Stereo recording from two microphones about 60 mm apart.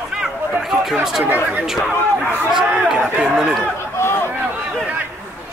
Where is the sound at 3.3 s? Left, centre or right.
Centre.